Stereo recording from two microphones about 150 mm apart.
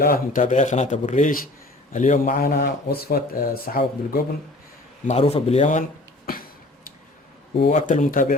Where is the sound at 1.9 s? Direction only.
55° left (ahead or behind); by 4.2 s 85° left.